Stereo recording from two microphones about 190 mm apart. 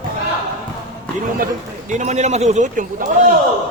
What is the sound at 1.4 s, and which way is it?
Speech, 40° right (ahead or behind).